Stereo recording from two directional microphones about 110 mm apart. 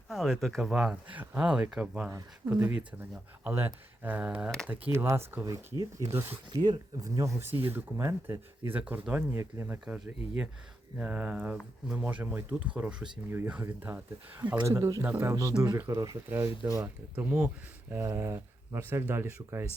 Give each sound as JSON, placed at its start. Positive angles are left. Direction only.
{"t": 0.1, "sound": "speech", "side_deg": 0}
{"t": 6.5, "sound": "speech", "side_deg": -40}
{"t": 8.8, "sound": "speech", "side_deg": -10}
{"t": 9.8, "sound": "speech", "side_deg": -10}
{"t": 14.6, "sound": "speech", "side_deg": -30}
{"t": 15.0, "sound": "speech", "side_deg": -20}
{"t": 15.4, "sound": "speech", "side_deg": -30}
{"t": 16.8, "sound": "speech", "side_deg": -15}